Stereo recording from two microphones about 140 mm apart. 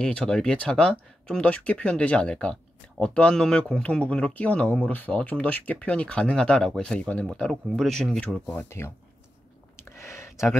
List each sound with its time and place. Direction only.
0.0 s speech: 5° left (ahead or behind)
8.5 s speech: 20° left (ahead or behind)
9.8 s a sound: 20° left (ahead or behind)